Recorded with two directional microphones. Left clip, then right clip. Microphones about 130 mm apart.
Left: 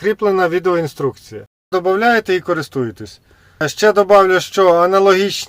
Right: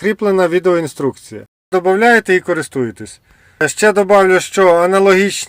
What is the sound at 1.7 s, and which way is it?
Speech, 15° right (ahead or behind).